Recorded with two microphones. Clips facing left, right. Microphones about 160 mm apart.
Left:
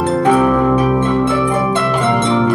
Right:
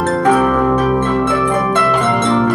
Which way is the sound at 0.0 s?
20° left (ahead or behind).